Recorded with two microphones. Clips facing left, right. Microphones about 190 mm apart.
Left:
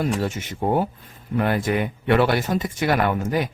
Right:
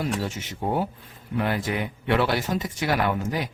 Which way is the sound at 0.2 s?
55° left (ahead or behind).